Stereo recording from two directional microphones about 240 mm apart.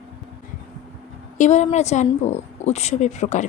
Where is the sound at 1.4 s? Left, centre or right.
Left.